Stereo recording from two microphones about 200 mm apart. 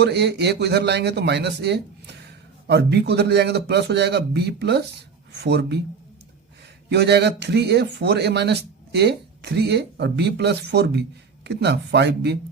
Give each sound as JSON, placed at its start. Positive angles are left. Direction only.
{"t": 0.0, "sound": "a man's voice", "side_deg": -55}
{"t": 6.9, "sound": "a man's voice", "side_deg": -55}